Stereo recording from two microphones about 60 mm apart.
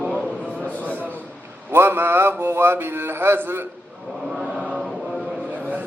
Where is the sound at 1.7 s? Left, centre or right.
Right.